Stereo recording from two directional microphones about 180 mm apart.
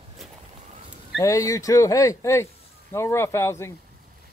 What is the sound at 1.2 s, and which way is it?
Speech, 20° left (ahead or behind).